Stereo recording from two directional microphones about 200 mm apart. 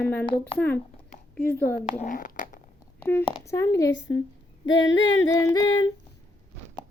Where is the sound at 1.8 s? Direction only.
40° left (ahead or behind).